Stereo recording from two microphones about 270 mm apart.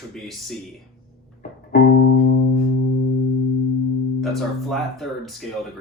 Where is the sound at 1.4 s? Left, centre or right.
Left.